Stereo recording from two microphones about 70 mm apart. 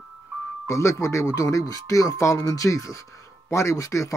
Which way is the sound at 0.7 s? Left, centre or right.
Left.